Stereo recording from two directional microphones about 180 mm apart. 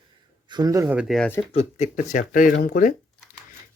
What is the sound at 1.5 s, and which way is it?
Speech, 35° left (ahead or behind).